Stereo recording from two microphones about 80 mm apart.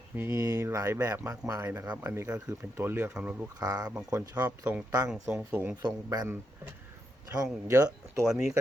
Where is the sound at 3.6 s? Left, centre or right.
Right.